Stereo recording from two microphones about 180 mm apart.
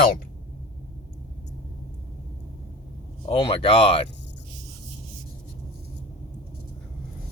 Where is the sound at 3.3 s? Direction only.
30° left (ahead or behind).